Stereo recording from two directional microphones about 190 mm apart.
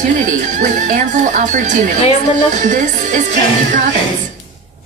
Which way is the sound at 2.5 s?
45° right (ahead or behind).